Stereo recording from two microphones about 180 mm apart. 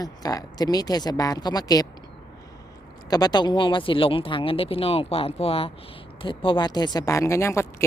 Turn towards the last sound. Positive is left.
turn(degrees=15)  # may be behind; listen again after turning